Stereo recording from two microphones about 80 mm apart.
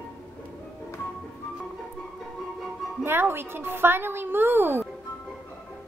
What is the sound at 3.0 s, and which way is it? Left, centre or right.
A woman's voice, right.